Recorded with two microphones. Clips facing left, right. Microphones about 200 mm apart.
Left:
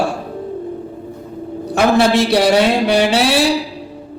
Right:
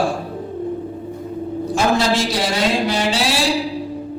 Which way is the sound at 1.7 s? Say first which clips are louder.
Left 5 dB; 60° left (ahead or behind).